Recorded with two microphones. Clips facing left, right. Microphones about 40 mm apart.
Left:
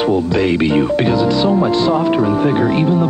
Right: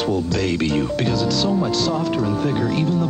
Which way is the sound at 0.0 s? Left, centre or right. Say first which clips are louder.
Left 6 dB; left.